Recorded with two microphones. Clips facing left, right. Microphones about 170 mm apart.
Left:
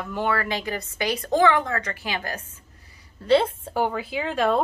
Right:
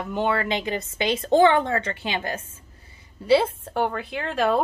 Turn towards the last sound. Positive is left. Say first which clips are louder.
# even
turn(degrees=0)  # may be behind; listen again after turning